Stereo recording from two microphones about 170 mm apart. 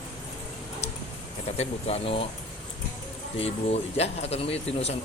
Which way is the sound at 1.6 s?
40° left (ahead or behind).